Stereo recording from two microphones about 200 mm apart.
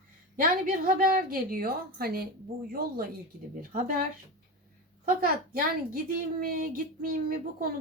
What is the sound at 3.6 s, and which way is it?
Speech, 45° right (ahead or behind).